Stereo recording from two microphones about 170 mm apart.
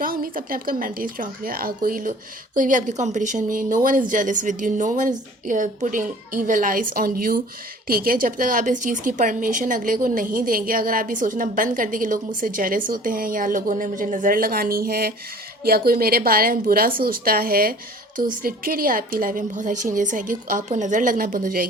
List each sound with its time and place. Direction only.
0.0 s a woman's voice: 55° right (ahead or behind)